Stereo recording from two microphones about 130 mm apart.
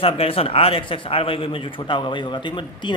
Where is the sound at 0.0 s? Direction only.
50° left (ahead or behind).